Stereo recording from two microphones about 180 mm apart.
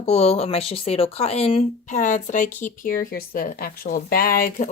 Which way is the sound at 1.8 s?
45° left (ahead or behind).